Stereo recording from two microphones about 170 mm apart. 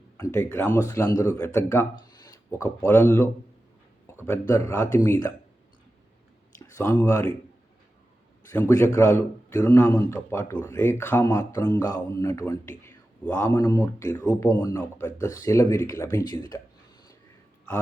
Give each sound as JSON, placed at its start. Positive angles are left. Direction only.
{"t": 0.2, "sound": "a man's voice", "side_deg": 15}
{"t": 4.3, "sound": "a man's voice", "side_deg": 20}
{"t": 6.6, "sound": "a sound", "side_deg": 15}
{"t": 7.0, "sound": "a man's voice", "side_deg": 15}
{"t": 8.5, "sound": "a man's voice", "side_deg": 15}